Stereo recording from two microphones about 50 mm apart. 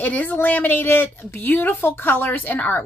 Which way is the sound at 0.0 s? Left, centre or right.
Left.